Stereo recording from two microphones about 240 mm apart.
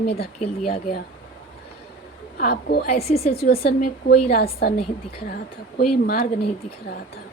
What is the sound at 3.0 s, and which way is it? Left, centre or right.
Speech, left.